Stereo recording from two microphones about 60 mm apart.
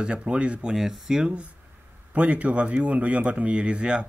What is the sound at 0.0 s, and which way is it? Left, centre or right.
Speech, centre.